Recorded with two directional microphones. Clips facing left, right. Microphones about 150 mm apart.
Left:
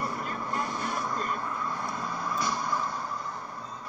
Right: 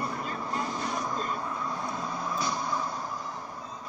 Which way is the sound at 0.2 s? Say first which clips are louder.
Even; 20° right (ahead or behind).